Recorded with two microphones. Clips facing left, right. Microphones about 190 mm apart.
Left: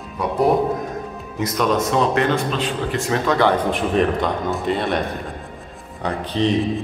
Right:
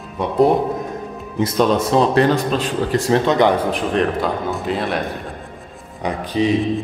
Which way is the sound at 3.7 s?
Centre (ahead or behind).